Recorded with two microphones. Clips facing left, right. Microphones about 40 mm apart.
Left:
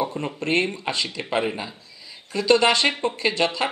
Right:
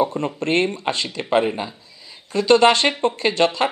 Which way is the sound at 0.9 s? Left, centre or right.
Right.